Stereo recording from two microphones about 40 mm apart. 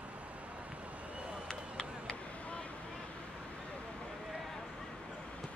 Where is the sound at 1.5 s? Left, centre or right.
Centre.